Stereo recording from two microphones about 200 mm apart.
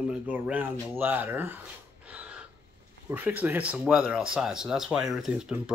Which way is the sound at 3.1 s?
10° right (ahead or behind).